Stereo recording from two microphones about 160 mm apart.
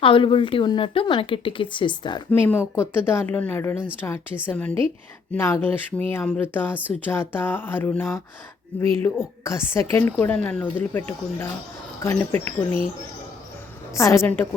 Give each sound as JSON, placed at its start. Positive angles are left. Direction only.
{"t": 0.0, "sound": "speech", "side_deg": 35}
{"t": 2.3, "sound": "speech", "side_deg": 15}
{"t": 12.0, "sound": "speech", "side_deg": 15}
{"t": 13.9, "sound": "speech", "side_deg": 20}